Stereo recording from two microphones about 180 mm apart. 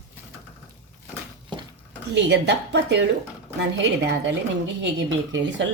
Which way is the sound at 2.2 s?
75° right (ahead or behind).